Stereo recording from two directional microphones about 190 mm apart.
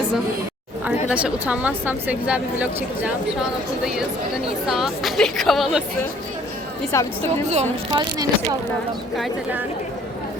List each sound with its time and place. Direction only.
1.1 s a woman's voice: 5° right (ahead or behind)
4.4 s a woman's voice: centre (ahead or behind)
6.9 s a woman's voice: 15° left (ahead or behind)
7.9 s speech: 20° right (ahead or behind)
9.1 s a woman's voice: 5° right (ahead or behind)